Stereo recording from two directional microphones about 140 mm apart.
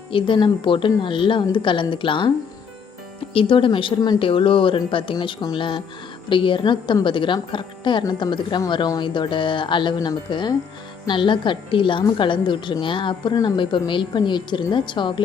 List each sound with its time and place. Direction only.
0.1 s a woman's voice: 35° left (ahead or behind)
3.3 s a woman's voice: 40° left (ahead or behind)